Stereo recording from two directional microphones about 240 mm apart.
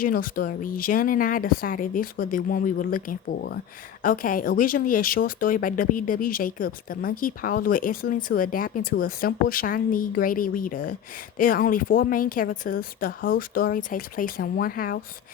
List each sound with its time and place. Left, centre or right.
0.0 s speech: left